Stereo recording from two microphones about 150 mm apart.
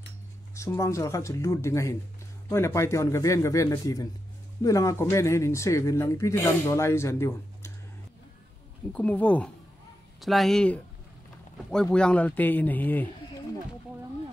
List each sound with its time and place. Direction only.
0.6 s speech: 20° left (ahead or behind)
8.9 s speech: 10° left (ahead or behind)